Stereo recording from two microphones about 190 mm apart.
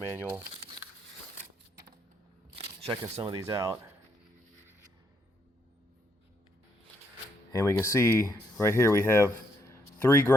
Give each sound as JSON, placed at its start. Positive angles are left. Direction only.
{"t": 0.2, "sound": "speech", "side_deg": -10}
{"t": 2.6, "sound": "a sound", "side_deg": -30}
{"t": 3.4, "sound": "speech", "side_deg": -15}
{"t": 7.5, "sound": "speech", "side_deg": 15}